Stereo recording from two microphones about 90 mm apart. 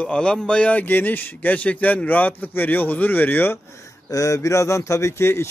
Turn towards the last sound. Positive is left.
turn(degrees=30)  # may be behind; listen again after turning